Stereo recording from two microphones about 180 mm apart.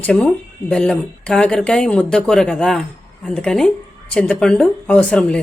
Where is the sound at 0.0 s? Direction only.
5° left (ahead or behind).